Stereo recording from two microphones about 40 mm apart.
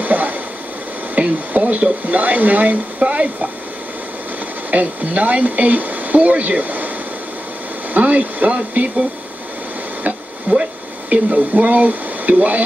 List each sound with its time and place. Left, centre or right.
0.0 s a sound: right
1.1 s speech: right
4.6 s speech: right
7.9 s speech: right
10.5 s speech: right